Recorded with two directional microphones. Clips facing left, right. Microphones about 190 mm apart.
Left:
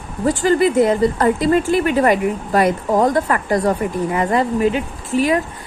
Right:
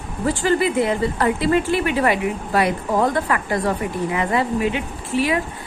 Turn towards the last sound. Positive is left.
turn(degrees=45)  # may be behind; listen again after turning